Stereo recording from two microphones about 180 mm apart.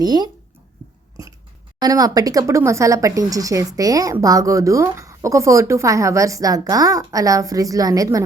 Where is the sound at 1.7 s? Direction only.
20° right (ahead or behind).